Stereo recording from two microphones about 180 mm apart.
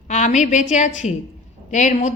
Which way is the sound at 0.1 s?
40° left (ahead or behind).